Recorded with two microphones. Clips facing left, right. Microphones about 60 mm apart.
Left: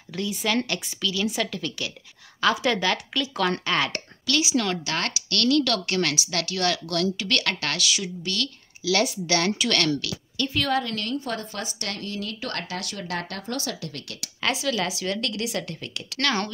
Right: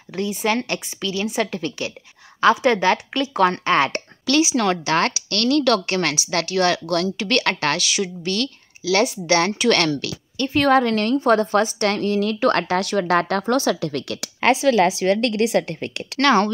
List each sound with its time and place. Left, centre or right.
0.1 s speech: right
4.6 s a woman's voice: right
8.8 s speech: centre
10.6 s a woman's voice: right
14.4 s a woman's voice: right